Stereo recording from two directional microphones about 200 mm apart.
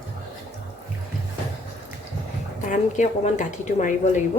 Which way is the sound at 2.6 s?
35° left (ahead or behind).